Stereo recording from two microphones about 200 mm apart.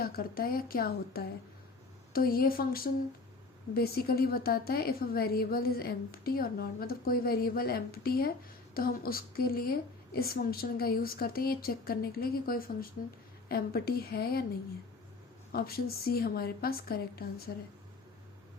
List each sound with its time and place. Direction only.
0.0 s a woman's voice: 50° left (ahead or behind)
15.5 s a woman's voice: 50° left (ahead or behind)